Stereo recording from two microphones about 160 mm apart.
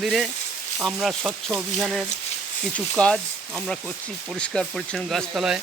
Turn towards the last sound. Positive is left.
turn(degrees=-5)  # may be behind; listen again after turning